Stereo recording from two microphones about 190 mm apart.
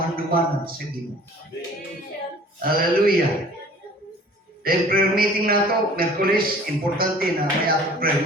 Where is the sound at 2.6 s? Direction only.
50° right (ahead or behind).